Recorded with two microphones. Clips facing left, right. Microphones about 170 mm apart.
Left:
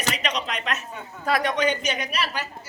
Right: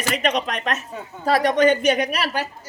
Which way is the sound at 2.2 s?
40° right (ahead or behind).